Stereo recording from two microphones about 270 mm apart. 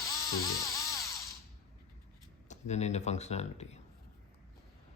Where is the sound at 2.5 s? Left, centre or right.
Left.